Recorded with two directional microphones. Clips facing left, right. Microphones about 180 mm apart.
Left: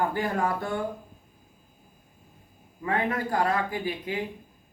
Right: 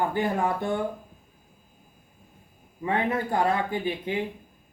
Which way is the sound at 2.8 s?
25° right (ahead or behind).